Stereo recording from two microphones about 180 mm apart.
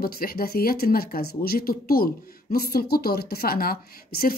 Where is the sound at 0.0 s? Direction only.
55° left (ahead or behind).